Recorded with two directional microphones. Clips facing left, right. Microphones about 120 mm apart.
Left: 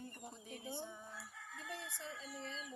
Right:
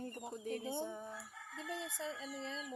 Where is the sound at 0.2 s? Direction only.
90° right.